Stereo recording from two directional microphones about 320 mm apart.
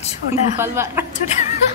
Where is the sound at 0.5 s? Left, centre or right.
Centre.